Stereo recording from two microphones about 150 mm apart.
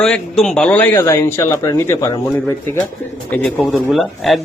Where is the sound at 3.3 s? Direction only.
5° left (ahead or behind).